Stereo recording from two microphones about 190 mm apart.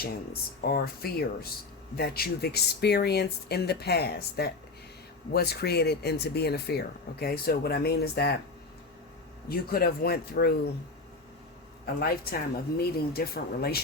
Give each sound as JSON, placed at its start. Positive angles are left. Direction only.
{"t": 0.7, "sound": "speech", "side_deg": 55}
{"t": 9.5, "sound": "speech", "side_deg": 50}
{"t": 11.9, "sound": "speech", "side_deg": 55}